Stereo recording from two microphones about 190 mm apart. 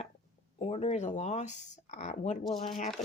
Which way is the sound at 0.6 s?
35° left (ahead or behind).